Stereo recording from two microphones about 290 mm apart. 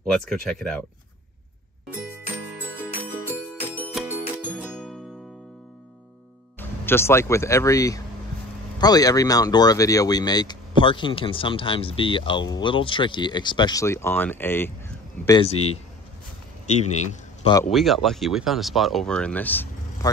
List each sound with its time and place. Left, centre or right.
0.0 s speech: centre
3.3 s music: centre
6.6 s speech: centre
16.6 s a man's voice: left
17.6 s speech: centre